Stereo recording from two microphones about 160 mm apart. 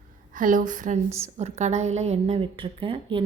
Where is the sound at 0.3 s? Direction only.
55° right (ahead or behind).